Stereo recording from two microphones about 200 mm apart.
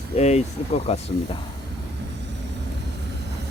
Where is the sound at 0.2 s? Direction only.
35° left (ahead or behind).